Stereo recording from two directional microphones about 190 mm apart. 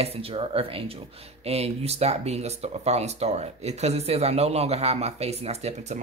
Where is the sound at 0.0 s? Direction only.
30° right (ahead or behind).